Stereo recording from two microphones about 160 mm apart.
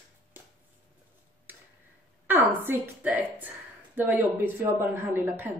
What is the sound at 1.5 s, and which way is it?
Tick-tock, 10° right (ahead or behind).